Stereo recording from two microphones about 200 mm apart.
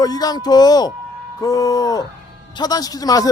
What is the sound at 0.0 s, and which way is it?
A man's voice, 20° left (ahead or behind).